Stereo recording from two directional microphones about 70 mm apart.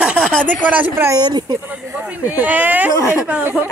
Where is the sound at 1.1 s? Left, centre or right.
Right.